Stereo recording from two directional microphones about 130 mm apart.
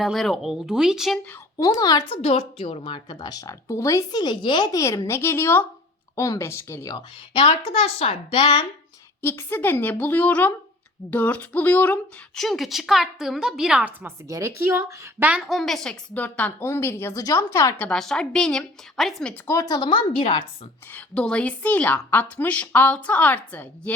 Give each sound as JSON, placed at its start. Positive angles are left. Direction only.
{"t": 0.0, "sound": "a woman's voice", "side_deg": 0}
{"t": 1.5, "sound": "speech", "side_deg": 30}
{"t": 2.0, "sound": "a woman's voice", "side_deg": 45}
{"t": 7.3, "sound": "a woman's voice", "side_deg": 50}
{"t": 9.2, "sound": "a woman's voice", "side_deg": 20}
{"t": 12.3, "sound": "a woman's voice", "side_deg": 0}
{"t": 14.3, "sound": "a woman's voice", "side_deg": -25}
{"t": 15.3, "sound": "a woman's voice", "side_deg": 0}
{"t": 17.7, "sound": "a woman's voice", "side_deg": 5}
{"t": 19.5, "sound": "a woman's voice", "side_deg": 25}
{"t": 20.9, "sound": "a woman's voice", "side_deg": 10}